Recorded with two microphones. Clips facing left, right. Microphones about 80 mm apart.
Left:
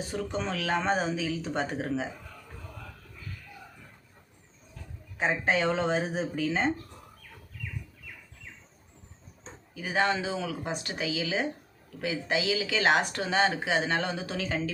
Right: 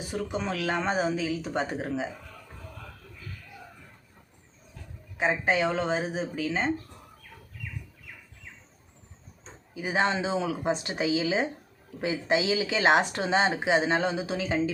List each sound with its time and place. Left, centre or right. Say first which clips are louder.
0.1 s speech: right 3 dB; centre
5.1 s speech: right 1 dB; centre
9.7 s speech: right 1 dB; centre